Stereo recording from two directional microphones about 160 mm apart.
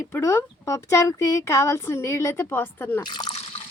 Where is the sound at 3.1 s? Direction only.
25° left (ahead or behind).